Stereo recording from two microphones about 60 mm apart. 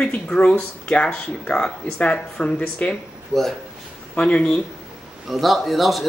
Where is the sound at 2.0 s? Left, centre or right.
Left.